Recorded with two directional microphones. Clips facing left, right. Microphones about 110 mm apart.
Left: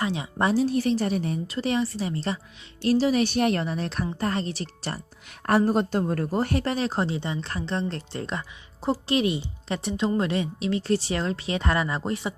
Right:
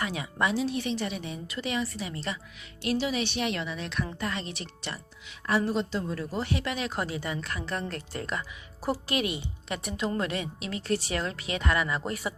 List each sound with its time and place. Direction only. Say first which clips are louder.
0.0 s a woman's voice: left 4 dB; 30° left (ahead or behind)